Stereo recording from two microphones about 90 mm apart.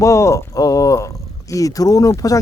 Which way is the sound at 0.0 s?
35° left (ahead or behind).